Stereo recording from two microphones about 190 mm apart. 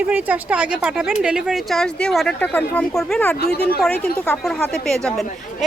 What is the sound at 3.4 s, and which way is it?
Speech, 55° left (ahead or behind).